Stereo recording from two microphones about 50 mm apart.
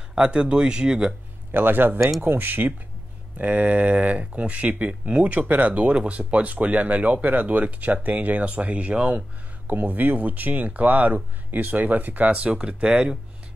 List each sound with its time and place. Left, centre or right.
0.1 s speech: centre
1.5 s speech: right
3.3 s speech: right
12.3 s speech: right